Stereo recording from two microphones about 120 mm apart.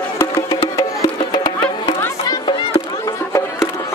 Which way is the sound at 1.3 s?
35° left (ahead or behind).